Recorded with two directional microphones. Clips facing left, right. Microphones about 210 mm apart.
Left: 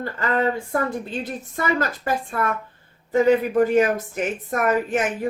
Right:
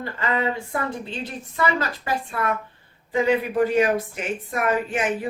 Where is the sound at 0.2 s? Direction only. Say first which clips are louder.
Left 3 dB; 45° left (ahead or behind).